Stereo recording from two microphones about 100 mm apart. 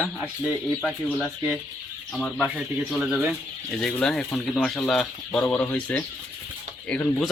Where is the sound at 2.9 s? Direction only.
Centre (ahead or behind).